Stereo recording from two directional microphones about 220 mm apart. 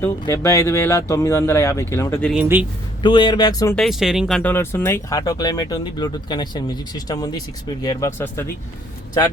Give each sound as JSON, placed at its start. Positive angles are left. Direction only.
{"t": 0.0, "sound": "speech", "side_deg": 15}
{"t": 2.3, "sound": "speech", "side_deg": -10}
{"t": 3.0, "sound": "speech", "side_deg": 20}
{"t": 3.8, "sound": "speech", "side_deg": 0}